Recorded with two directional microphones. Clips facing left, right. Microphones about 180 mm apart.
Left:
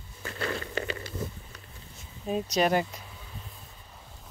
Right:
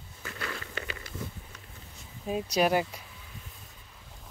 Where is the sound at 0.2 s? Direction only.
35° left (ahead or behind).